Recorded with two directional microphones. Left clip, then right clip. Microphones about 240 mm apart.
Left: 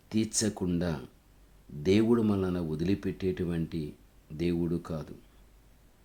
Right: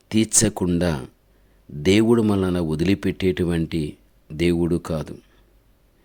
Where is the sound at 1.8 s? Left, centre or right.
Right.